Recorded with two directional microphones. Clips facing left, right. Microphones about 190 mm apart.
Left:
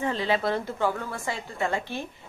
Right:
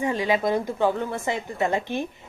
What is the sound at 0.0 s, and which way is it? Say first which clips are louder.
A woman's voice: right 3 dB; 15° right (ahead or behind).